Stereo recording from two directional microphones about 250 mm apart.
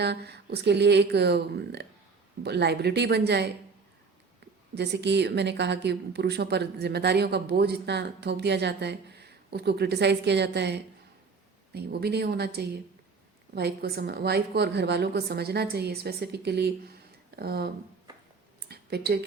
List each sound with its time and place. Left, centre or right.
0.0 s a woman's voice: right
4.7 s a woman's voice: right
18.7 s speech: right